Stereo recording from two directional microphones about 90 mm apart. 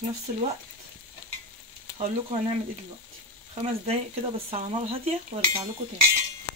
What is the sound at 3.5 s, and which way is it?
Speech, 90° right.